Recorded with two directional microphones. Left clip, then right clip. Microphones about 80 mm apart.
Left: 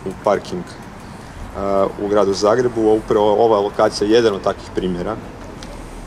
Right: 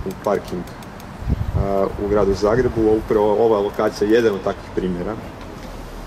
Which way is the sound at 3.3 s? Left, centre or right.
Left.